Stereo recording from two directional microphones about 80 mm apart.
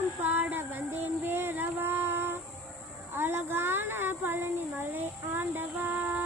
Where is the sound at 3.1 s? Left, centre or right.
Right.